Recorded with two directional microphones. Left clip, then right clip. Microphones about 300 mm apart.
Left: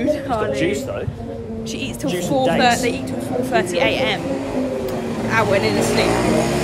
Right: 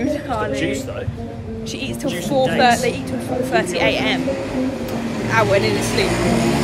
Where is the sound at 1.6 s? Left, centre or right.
Centre.